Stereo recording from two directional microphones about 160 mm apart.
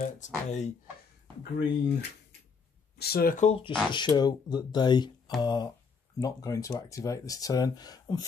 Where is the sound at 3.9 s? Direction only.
30° left (ahead or behind).